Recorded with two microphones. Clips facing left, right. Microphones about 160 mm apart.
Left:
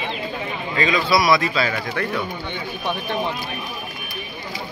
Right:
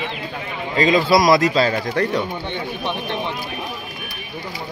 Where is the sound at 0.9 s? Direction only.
40° right (ahead or behind).